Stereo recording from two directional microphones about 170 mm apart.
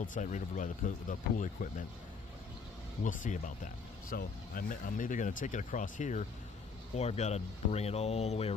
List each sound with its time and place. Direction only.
0.0 s speech: 50° left (ahead or behind)
3.0 s speech: 50° left (ahead or behind)